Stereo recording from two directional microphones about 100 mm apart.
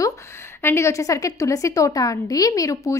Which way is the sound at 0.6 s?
25° left (ahead or behind).